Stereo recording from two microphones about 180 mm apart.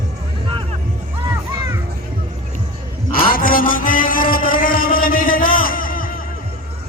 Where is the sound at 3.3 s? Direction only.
50° left (ahead or behind).